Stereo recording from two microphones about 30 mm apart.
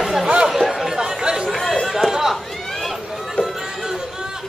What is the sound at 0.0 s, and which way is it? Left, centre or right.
Chatter, centre.